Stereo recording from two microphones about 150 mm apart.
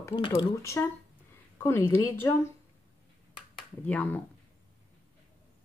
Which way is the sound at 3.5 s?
10° left (ahead or behind).